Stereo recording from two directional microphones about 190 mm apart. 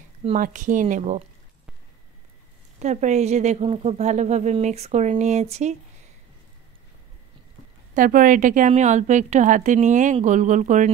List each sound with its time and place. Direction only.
0.4 s speech: 40° right (ahead or behind)
2.8 s a woman's voice: 40° right (ahead or behind)
7.9 s a woman's voice: 45° right (ahead or behind)